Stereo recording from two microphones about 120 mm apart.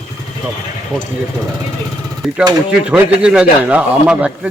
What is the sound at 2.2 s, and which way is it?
A man's voice, centre (ahead or behind).